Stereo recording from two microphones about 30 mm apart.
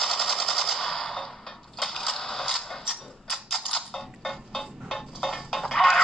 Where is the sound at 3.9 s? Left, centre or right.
Centre.